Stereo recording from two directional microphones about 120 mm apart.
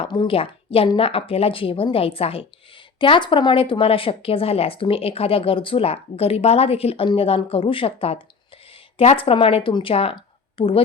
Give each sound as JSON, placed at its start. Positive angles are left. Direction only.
{"t": 0.0, "sound": "speech", "side_deg": 45}